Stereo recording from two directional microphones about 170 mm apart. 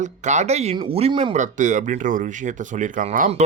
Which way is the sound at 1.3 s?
45° right (ahead or behind).